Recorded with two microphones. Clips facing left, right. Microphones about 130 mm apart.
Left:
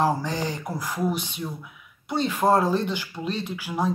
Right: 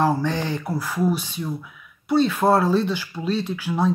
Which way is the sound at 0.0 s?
15° left (ahead or behind).